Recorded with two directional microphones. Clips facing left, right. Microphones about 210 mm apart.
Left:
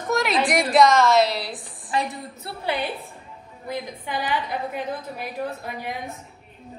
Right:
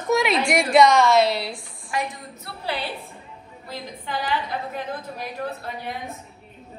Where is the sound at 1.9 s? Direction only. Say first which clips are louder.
Left 2 dB; 30° left (ahead or behind).